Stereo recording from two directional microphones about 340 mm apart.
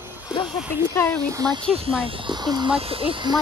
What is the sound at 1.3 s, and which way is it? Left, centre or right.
Speech, centre.